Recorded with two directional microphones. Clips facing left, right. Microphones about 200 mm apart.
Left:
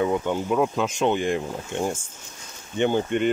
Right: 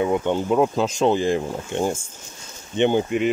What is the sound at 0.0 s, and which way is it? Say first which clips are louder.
Speech: right 2 dB; 20° right (ahead or behind).